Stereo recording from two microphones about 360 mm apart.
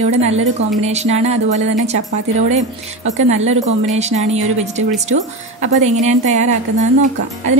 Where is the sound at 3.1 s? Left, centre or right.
Centre.